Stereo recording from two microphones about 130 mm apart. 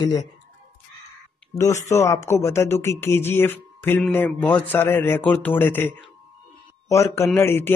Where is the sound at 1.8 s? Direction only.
25° left (ahead or behind).